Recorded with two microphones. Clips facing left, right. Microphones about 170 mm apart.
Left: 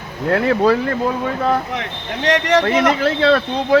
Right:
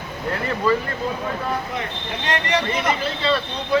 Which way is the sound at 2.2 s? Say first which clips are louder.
Left 8 dB; 90° left.